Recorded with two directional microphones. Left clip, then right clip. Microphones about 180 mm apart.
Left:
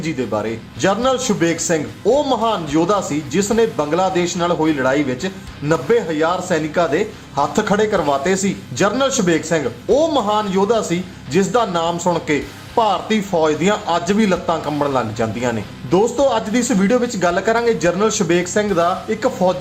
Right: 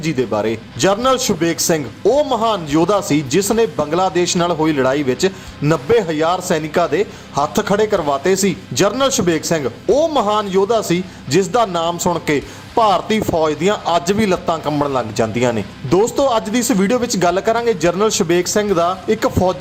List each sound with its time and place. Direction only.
0.0 s a man's voice: 30° right (ahead or behind)